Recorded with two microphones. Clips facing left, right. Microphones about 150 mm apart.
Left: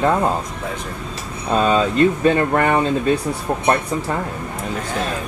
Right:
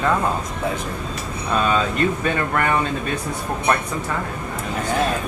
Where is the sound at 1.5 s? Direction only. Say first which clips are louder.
Left 4 dB; 25° left (ahead or behind).